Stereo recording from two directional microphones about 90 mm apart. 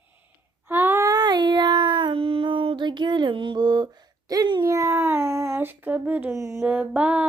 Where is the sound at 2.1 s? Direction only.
90° right; by 4.5 s 45° right (ahead or behind).